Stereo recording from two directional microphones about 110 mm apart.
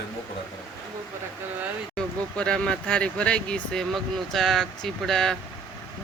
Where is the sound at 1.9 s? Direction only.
10° left (ahead or behind).